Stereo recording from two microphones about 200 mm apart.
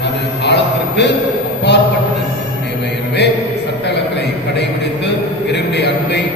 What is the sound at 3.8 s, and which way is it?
A man's voice, 60° left (ahead or behind).